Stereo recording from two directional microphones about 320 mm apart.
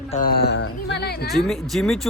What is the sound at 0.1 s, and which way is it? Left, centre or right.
Speech, left.